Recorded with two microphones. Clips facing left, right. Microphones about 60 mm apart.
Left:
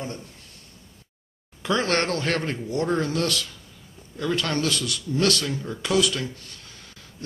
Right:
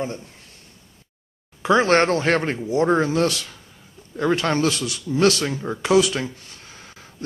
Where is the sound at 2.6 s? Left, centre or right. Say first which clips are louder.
Right 7 dB; centre; by 5.9 s right.